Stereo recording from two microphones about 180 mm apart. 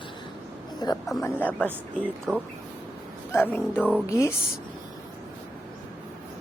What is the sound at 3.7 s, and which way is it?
Speech, 5° right (ahead or behind).